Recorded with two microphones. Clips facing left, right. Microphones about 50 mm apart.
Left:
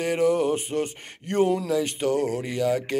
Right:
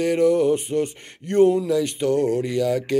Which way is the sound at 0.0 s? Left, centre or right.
Left.